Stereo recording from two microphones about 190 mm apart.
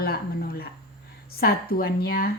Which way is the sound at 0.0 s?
55° left (ahead or behind).